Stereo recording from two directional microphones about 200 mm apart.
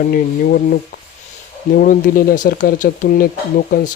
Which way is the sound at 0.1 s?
45° left (ahead or behind).